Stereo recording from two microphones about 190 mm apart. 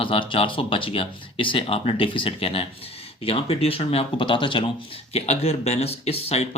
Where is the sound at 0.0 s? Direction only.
30° left (ahead or behind).